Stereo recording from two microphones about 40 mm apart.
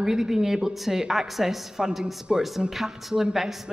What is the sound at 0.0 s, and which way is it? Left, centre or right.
Speech, centre.